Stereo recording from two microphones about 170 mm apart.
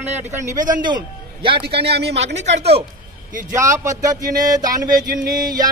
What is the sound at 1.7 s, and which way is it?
Speech, 75° right (ahead or behind).